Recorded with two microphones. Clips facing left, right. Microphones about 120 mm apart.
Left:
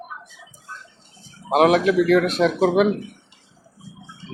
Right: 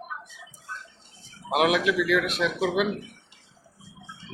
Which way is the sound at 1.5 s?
35° left (ahead or behind).